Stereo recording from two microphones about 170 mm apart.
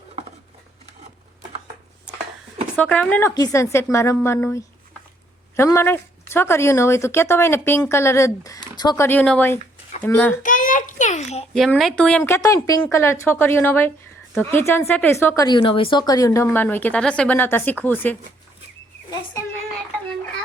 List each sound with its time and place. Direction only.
2.7 s speech: 10° left (ahead or behind); by 9.0 s 25° left (ahead or behind)
9.0 s speech: 10° left (ahead or behind)
10.4 s a sound: 50° left (ahead or behind)
11.5 s speech: centre (ahead or behind)
12.3 s speech: 20° left (ahead or behind)
15.4 s speech: 30° left (ahead or behind); by 18.2 s 10° left (ahead or behind)